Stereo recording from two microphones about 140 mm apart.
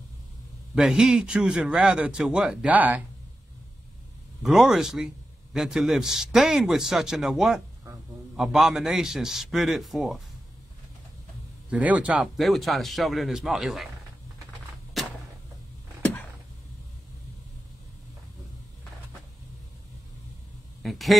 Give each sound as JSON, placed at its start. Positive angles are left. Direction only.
{"t": 0.7, "sound": "speech", "side_deg": -5}
{"t": 4.4, "sound": "a man's voice", "side_deg": -5}
{"t": 11.7, "sound": "a man's voice", "side_deg": -10}
{"t": 15.0, "sound": "a sound", "side_deg": 0}
{"t": 16.0, "sound": "a sound", "side_deg": 15}
{"t": 20.8, "sound": "speech", "side_deg": 0}